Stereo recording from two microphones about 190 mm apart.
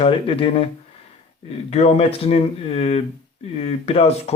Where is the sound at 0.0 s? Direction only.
30° left (ahead or behind).